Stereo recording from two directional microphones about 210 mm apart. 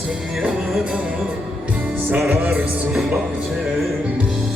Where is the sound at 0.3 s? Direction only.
Centre (ahead or behind).